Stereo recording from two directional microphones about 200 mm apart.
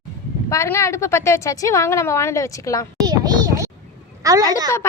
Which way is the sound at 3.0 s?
20° right (ahead or behind).